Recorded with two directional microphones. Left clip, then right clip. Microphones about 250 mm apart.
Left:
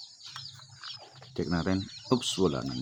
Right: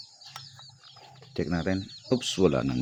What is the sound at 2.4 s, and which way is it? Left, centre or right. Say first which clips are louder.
Speech: right 10 dB; right.